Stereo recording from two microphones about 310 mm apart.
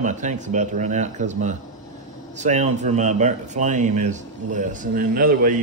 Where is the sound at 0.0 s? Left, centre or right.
Right.